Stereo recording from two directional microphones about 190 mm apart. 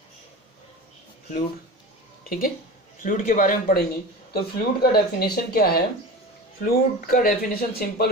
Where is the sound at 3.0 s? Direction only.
45° left (ahead or behind).